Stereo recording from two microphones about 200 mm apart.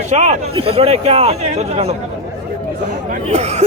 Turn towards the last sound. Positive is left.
turn(degrees=-35)  # may be behind; listen again after turning